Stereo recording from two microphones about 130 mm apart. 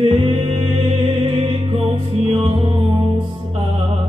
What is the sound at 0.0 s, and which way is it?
Music, 50° right (ahead or behind).